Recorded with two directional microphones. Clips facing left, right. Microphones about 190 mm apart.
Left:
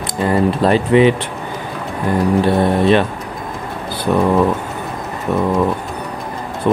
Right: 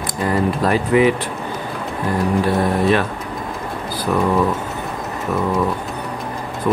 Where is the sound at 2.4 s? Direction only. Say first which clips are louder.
Left 3 dB; 25° left (ahead or behind).